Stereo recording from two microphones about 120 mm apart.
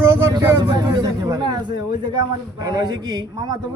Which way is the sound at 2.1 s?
30° right (ahead or behind).